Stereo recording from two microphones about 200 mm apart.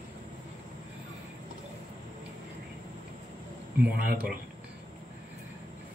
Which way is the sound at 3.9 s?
45° right (ahead or behind).